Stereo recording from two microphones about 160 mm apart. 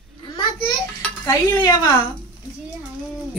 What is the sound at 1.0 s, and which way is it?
Dishes, 15° left (ahead or behind).